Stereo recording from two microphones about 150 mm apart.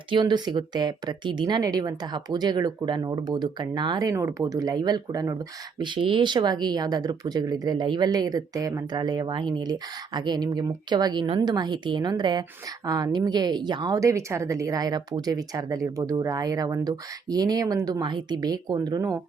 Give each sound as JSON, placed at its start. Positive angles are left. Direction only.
{"t": 0.1, "sound": "a woman's voice", "side_deg": -30}